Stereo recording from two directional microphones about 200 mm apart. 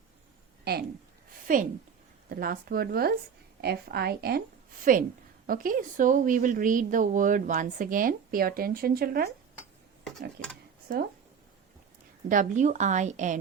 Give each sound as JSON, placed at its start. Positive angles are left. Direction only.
{"t": 0.6, "sound": "speech", "side_deg": -50}
{"t": 1.5, "sound": "a woman's voice", "side_deg": -40}
{"t": 12.3, "sound": "a woman's voice", "side_deg": -40}